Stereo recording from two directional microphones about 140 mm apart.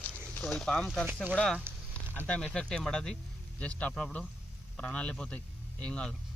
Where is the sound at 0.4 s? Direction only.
Centre (ahead or behind).